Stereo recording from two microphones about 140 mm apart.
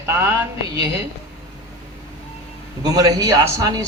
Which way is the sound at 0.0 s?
15° right (ahead or behind).